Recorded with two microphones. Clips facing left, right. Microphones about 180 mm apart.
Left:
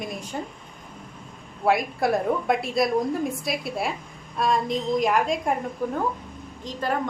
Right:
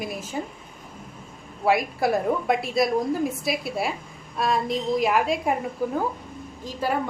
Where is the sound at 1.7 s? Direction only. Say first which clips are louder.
Even; centre (ahead or behind).